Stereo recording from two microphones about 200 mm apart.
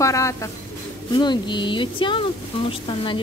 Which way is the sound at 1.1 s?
20° left (ahead or behind).